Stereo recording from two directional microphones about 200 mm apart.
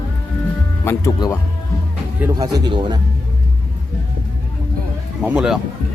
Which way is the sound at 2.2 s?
20° right (ahead or behind).